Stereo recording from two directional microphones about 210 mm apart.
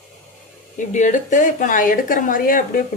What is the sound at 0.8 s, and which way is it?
A woman's voice, 35° left (ahead or behind).